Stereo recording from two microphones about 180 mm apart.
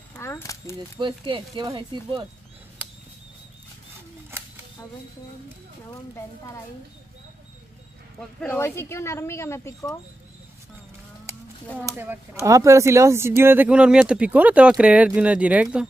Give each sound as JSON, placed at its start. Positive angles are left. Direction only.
{"t": 0.1, "sound": "a sound", "side_deg": 15}
{"t": 0.9, "sound": "speech", "side_deg": -25}
{"t": 5.9, "sound": "speech", "side_deg": 15}
{"t": 8.4, "sound": "speech", "side_deg": 15}
{"t": 11.8, "sound": "speech", "side_deg": -15}